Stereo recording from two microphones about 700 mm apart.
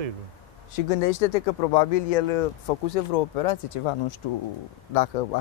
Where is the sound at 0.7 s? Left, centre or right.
Left.